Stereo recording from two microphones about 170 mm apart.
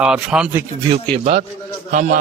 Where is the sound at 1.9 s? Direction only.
50° right (ahead or behind).